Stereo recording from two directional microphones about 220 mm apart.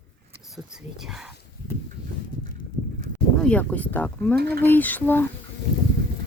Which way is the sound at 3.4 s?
5° left (ahead or behind).